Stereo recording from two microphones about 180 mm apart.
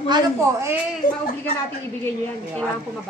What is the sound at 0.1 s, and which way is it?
Speech, 15° right (ahead or behind).